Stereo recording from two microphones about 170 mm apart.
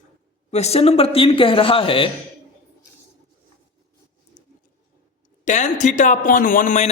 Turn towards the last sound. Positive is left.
turn(degrees=45)  # may be behind; listen again after turning